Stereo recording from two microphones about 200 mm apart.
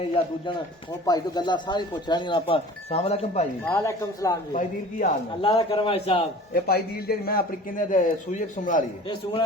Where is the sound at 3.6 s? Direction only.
15° left (ahead or behind).